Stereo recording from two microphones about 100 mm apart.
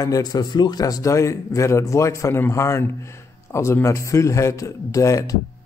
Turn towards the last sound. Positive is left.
turn(degrees=30)  # may be behind; listen again after turning